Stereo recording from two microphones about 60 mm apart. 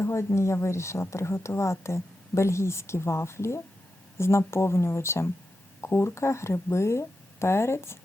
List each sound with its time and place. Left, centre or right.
0.0 s speech: left